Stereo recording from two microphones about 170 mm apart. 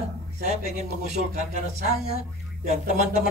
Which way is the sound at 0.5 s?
60° left (ahead or behind).